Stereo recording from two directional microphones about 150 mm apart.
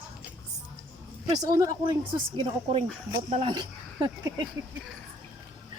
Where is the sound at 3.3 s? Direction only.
35° right (ahead or behind).